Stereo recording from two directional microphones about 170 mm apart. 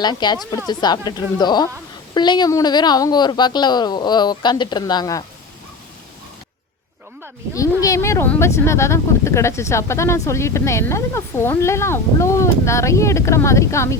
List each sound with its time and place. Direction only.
0.0 s speech: 25° left (ahead or behind)
7.5 s speech: 20° left (ahead or behind)